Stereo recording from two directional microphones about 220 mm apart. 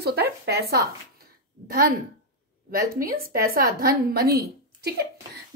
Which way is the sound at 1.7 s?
40° right (ahead or behind).